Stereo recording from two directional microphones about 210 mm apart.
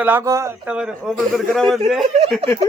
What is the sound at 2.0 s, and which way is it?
Speech, 30° right (ahead or behind).